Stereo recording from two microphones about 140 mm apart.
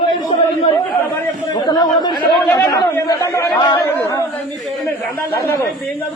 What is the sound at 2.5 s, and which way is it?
Chatter, 20° left (ahead or behind).